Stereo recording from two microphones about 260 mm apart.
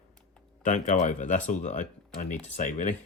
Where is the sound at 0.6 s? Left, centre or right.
Left.